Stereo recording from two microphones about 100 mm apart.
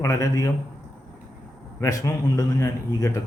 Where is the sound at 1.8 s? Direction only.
35° left (ahead or behind).